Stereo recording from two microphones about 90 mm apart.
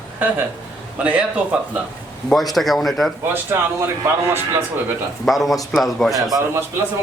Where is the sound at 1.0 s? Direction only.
15° right (ahead or behind).